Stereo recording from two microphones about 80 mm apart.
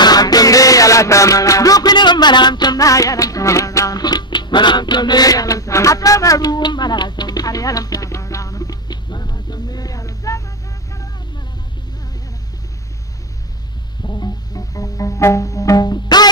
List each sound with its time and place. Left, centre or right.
0.0 s music: left
4.0 s music: left
14.0 s music: left